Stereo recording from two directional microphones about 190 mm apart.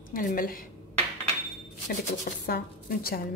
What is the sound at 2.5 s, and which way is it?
Speech, 50° left (ahead or behind).